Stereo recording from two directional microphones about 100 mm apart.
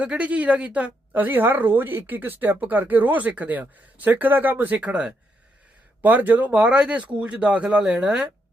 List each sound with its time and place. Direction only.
0.0 s speech: 15° right (ahead or behind)